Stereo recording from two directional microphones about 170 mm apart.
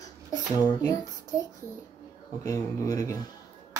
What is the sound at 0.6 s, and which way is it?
Child singing, 20° left (ahead or behind).